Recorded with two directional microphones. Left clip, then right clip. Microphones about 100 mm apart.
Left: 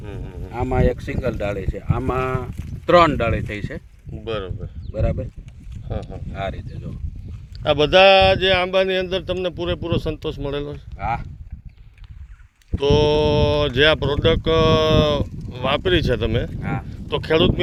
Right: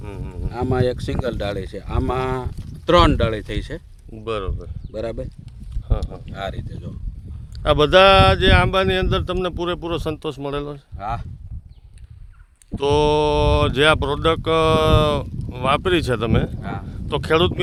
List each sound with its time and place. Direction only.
0.0 s a sound: 30° right (ahead or behind)
0.5 s speech: 90° right; by 3.8 s 70° right (ahead or behind)
4.2 s speech: 30° right (ahead or behind)
5.9 s speech: 40° right (ahead or behind)
7.6 s speech: 45° right (ahead or behind); by 10.8 s 15° right (ahead or behind)
10.9 s speech: centre (ahead or behind)
12.7 s speech: 20° right (ahead or behind)